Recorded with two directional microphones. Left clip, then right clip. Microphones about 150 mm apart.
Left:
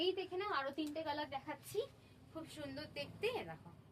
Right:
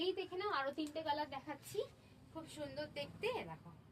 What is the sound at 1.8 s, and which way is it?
A woman's voice, 15° left (ahead or behind).